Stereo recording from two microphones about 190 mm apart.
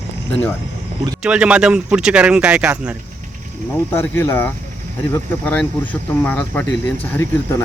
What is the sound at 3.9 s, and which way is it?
Speech, 15° left (ahead or behind).